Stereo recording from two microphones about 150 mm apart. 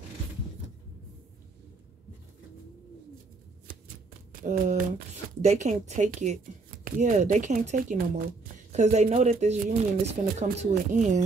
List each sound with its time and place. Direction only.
4.3 s speech: 60° right (ahead or behind)